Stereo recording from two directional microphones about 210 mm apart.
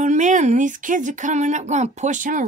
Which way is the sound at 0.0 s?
35° right (ahead or behind).